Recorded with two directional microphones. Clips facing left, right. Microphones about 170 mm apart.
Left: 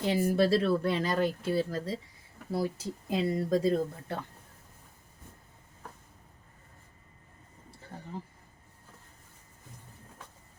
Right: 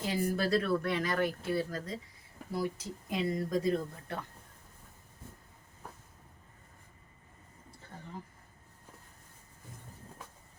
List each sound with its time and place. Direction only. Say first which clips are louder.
0.0 s speech: left 6 dB; 30° left (ahead or behind)